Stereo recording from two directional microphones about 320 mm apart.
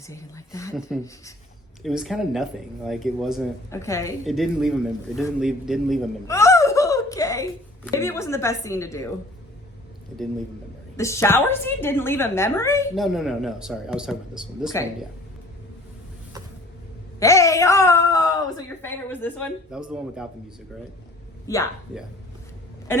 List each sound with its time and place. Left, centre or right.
0.1 s a woman's voice: centre
10.9 s a woman's voice: centre
17.2 s a woman's voice: centre
21.4 s a woman's voice: centre